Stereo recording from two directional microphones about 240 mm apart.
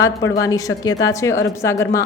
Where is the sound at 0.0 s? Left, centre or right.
Centre.